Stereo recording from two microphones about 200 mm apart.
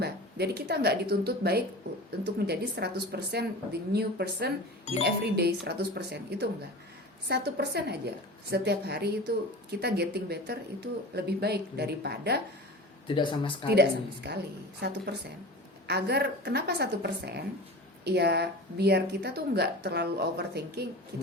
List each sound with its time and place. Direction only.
0.0 s a woman's voice: 55° right (ahead or behind)
13.1 s speech: 25° left (ahead or behind)
14.3 s a woman's voice: 55° right (ahead or behind)